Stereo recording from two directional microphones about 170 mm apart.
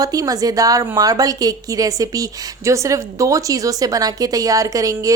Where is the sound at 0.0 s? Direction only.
20° right (ahead or behind).